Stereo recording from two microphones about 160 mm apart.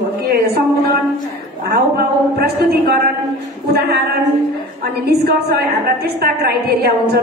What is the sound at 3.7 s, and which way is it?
Speech, 75° right (ahead or behind).